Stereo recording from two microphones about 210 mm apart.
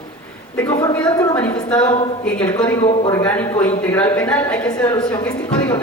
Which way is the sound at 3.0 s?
20° left (ahead or behind).